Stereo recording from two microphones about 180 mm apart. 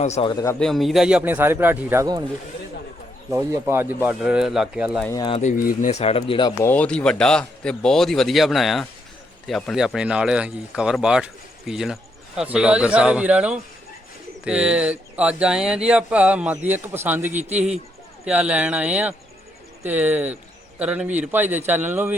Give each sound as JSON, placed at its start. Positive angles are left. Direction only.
{"t": 0.0, "sound": "speech", "side_deg": 40}
{"t": 0.3, "sound": "speech", "side_deg": 20}
{"t": 0.6, "sound": "speech", "side_deg": 0}
{"t": 3.3, "sound": "speech", "side_deg": -15}
{"t": 5.0, "sound": "speech", "side_deg": 20}
{"t": 5.3, "sound": "speech", "side_deg": 45}
{"t": 6.6, "sound": "speech", "side_deg": 10}